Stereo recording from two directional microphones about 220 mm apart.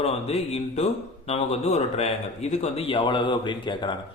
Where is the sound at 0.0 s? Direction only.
25° left (ahead or behind).